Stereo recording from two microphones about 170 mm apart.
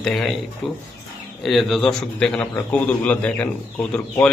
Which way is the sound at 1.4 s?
Centre (ahead or behind).